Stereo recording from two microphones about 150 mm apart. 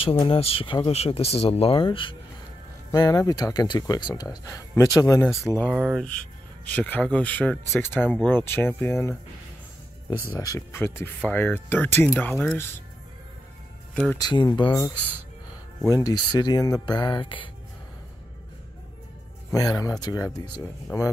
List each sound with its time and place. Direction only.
0.0 s speech: 35° left (ahead or behind); by 5.4 s 20° left (ahead or behind)
5.7 s speech: 5° right (ahead or behind)
6.7 s speech: 10° left (ahead or behind)
10.2 s speech: 20° left (ahead or behind)
14.1 s speech: 30° left (ahead or behind)
15.9 s speech: 25° left (ahead or behind)
19.5 s speech: 25° left (ahead or behind)